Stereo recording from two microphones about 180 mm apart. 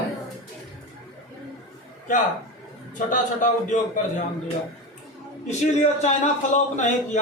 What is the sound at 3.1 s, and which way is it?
Speech, 45° left (ahead or behind).